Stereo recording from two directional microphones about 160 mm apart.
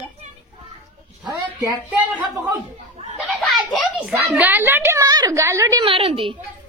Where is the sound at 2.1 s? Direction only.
10° right (ahead or behind).